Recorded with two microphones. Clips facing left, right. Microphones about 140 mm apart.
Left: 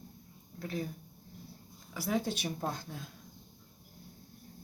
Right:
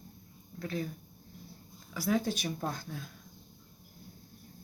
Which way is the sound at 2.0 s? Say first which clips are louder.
Right 2 dB; 20° left (ahead or behind).